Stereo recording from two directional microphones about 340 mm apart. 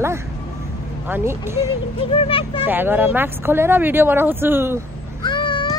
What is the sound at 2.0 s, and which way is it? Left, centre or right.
Speech, centre.